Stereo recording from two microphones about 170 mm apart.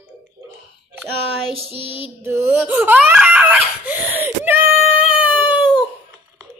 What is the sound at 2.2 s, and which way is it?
Laughter, 15° right (ahead or behind).